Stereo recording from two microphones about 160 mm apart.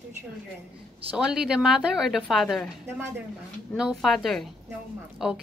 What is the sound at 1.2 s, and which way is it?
Speech, 5° right (ahead or behind).